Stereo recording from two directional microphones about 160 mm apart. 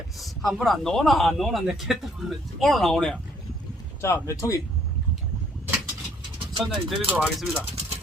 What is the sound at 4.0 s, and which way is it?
Speech, 15° left (ahead or behind).